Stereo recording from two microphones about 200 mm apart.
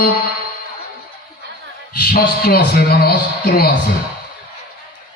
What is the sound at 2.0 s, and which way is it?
A man's voice, 50° left (ahead or behind).